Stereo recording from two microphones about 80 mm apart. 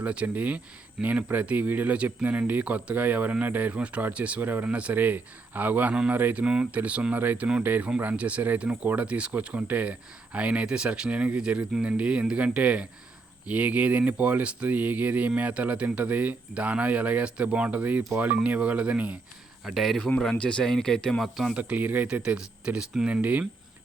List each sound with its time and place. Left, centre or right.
0.0 s speech: centre
5.9 s speech: centre
6.1 s speech: right
6.4 s speech: centre
19.6 s speech: centre
21.5 s speech: centre